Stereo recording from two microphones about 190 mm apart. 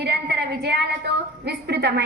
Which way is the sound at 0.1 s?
60° right (ahead or behind).